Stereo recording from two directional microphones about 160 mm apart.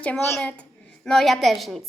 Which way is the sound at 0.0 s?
10° left (ahead or behind).